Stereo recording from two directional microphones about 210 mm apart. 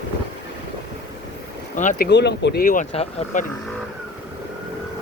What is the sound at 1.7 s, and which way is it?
Speech, 35° left (ahead or behind).